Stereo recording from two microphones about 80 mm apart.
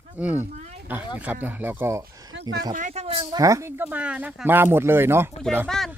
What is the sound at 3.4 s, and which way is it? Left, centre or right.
Speech, right.